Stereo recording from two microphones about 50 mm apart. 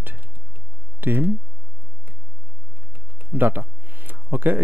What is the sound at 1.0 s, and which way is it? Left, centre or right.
Speech, right.